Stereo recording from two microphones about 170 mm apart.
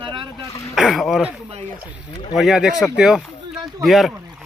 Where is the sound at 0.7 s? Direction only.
Centre (ahead or behind).